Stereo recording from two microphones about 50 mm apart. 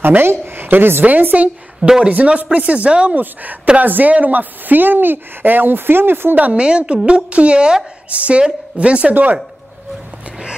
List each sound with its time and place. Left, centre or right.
0.0 s a woman's voice: right
1.0 s a woman's voice: right
1.8 s speech: centre
2.0 s a woman's voice: right
3.8 s a woman's voice: right
6.3 s a woman's voice: right
6.6 s a woman's voice: right